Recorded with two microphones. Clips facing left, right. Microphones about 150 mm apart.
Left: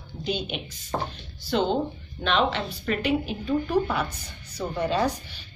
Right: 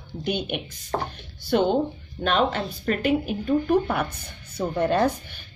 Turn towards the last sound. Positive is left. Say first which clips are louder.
# right 3 dB
turn(degrees=-55)  # may be behind; listen again after turning